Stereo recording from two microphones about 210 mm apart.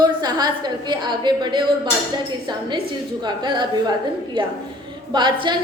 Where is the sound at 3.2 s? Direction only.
20° right (ahead or behind).